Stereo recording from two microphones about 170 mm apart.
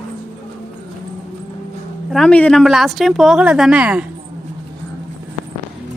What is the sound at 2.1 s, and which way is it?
A woman's voice, 5° left (ahead or behind).